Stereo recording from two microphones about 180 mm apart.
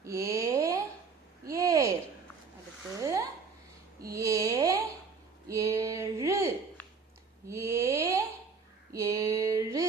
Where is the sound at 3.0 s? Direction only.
15° right (ahead or behind).